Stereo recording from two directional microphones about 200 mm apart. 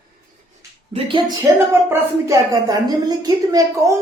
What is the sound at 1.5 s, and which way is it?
A woman's voice, 15° right (ahead or behind).